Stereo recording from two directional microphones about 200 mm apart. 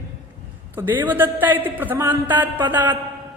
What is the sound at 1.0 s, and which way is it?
A man's voice, 10° right (ahead or behind).